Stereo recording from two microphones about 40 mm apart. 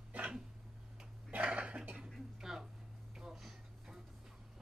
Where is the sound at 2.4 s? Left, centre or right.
Centre.